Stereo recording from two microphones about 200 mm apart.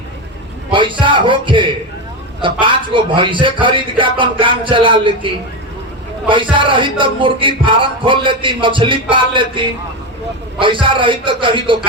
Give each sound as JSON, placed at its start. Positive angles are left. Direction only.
{"t": 0.7, "sound": "music", "side_deg": -25}